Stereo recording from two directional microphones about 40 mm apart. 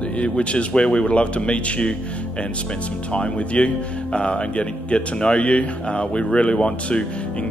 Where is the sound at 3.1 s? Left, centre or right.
Left.